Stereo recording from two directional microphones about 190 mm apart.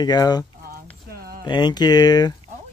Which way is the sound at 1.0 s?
55° right (ahead or behind).